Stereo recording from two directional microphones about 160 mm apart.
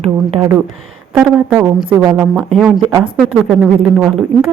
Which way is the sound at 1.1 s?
10° right (ahead or behind).